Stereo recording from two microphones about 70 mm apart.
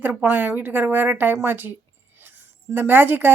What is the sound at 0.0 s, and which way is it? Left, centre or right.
A woman's voice, right.